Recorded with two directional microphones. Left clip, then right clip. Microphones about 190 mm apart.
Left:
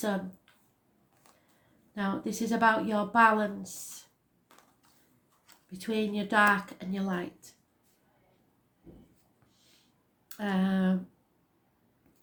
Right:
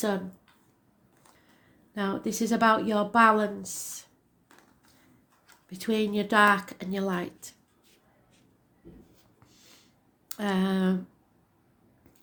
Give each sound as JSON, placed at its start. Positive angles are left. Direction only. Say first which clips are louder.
{"t": 2.0, "sound": "speech", "louder": "right 3 dB", "side_deg": -40}
{"t": 5.6, "sound": "speech", "louder": "right 4 dB", "side_deg": -45}
{"t": 10.2, "sound": "speech", "louder": "right 3 dB", "side_deg": -45}